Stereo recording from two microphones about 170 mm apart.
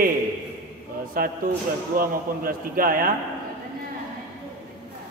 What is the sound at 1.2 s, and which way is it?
A man's voice, 55° right (ahead or behind).